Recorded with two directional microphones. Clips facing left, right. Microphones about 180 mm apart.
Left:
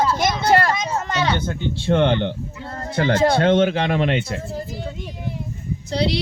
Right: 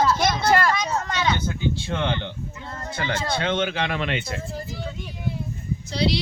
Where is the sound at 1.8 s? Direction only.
50° left (ahead or behind).